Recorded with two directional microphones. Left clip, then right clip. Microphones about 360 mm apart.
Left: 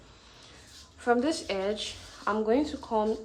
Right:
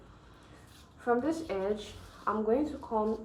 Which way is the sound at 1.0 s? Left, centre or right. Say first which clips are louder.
Left 4 dB; centre.